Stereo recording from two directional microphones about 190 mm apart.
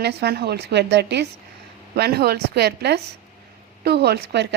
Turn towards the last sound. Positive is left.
turn(degrees=-60)  # may be behind; listen again after turning